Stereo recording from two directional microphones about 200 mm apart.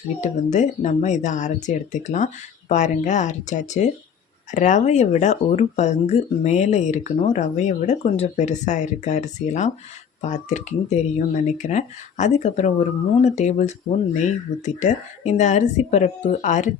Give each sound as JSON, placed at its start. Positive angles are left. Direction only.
{"t": 0.2, "sound": "speech", "side_deg": 35}